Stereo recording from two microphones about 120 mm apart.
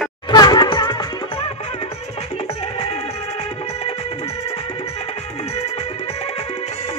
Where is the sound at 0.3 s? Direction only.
35° left (ahead or behind).